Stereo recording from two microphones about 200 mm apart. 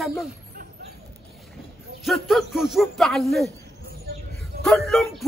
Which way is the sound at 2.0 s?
Centre (ahead or behind).